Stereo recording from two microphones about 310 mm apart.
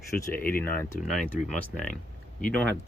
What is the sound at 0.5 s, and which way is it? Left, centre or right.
Speech, centre.